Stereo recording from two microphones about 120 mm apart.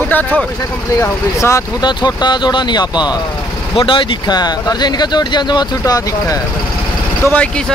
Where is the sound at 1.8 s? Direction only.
35° left (ahead or behind).